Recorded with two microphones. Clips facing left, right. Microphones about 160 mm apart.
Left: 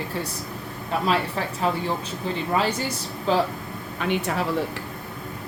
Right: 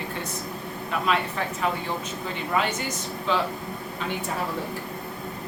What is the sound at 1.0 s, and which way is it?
A woman's voice, 30° left (ahead or behind).